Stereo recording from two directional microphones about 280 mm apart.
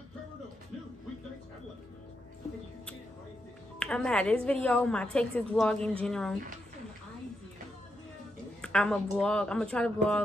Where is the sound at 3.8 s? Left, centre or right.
Centre.